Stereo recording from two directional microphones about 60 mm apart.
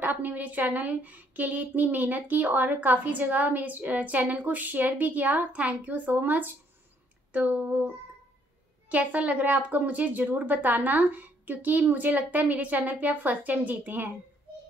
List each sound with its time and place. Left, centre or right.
0.0 s a woman's voice: right
7.3 s a sound: right
8.8 s a woman's voice: right